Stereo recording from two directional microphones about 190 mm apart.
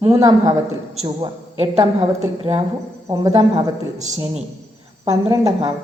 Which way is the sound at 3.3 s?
30° right (ahead or behind).